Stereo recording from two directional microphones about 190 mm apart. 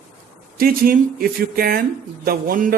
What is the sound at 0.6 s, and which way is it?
A man's voice, 50° right (ahead or behind).